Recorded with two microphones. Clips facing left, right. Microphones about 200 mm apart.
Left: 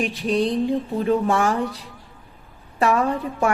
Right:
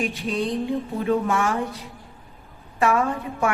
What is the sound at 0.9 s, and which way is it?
Speech, 30° left (ahead or behind).